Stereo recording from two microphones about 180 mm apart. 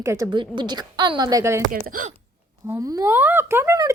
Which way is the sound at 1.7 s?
50° right (ahead or behind).